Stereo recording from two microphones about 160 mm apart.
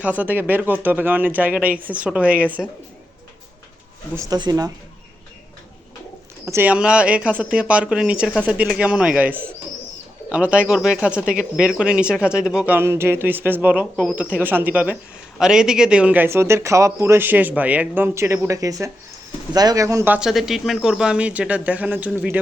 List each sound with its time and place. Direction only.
0.0 s speech: 10° right (ahead or behind)
4.1 s speech: 20° right (ahead or behind)
6.4 s speech: 15° right (ahead or behind)
13.9 s speech: centre (ahead or behind)
14.2 s speech: 10° right (ahead or behind)
20.1 s speech: 5° right (ahead or behind)